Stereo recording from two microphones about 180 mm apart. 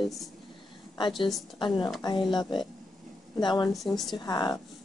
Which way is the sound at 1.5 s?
25° left (ahead or behind).